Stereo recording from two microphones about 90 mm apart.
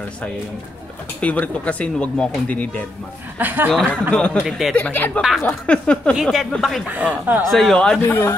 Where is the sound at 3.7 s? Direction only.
10° left (ahead or behind).